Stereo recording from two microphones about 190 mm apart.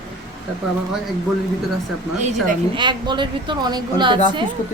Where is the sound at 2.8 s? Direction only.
25° right (ahead or behind).